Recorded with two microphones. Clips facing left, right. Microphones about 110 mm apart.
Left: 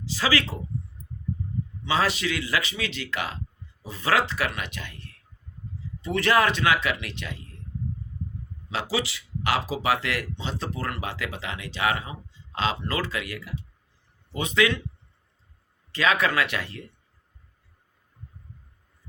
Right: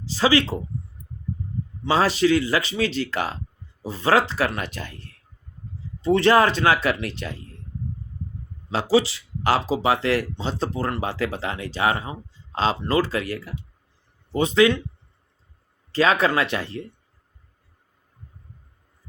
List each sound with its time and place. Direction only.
0.0 s speech: 30° right (ahead or behind)
1.8 s speech: 35° right (ahead or behind)
8.7 s speech: 30° right (ahead or behind)
15.9 s speech: 35° right (ahead or behind)